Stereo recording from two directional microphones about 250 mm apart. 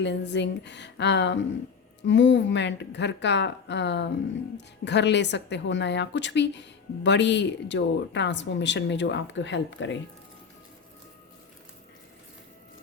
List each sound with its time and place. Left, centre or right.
0.0 s a woman's voice: left